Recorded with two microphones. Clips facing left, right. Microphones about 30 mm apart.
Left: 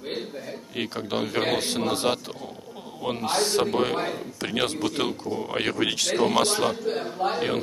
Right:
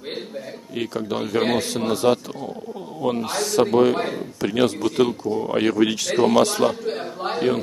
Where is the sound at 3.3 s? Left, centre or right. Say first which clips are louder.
Even; left.